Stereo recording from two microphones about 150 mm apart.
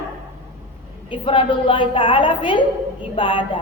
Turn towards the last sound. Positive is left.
turn(degrees=35)  # may be behind; listen again after turning